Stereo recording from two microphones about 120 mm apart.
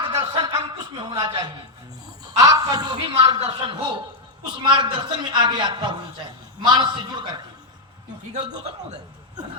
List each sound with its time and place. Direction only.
0.1 s a sound: 30° right (ahead or behind)
2.2 s a woman's voice: 30° right (ahead or behind)
3.0 s a man's voice: 50° right (ahead or behind)